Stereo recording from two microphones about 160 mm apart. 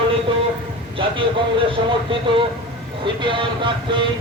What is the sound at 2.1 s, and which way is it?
A man's voice, 35° right (ahead or behind).